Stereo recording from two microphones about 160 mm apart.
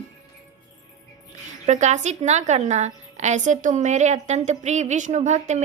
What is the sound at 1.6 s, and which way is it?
A woman's voice, 45° right (ahead or behind).